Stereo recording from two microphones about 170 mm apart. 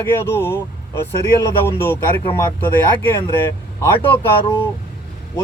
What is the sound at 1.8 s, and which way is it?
Speech, 15° left (ahead or behind).